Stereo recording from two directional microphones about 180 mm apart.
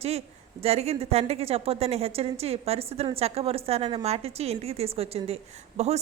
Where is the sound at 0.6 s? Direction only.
35° right (ahead or behind).